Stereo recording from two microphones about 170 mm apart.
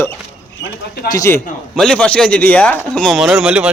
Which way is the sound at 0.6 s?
65° left (ahead or behind).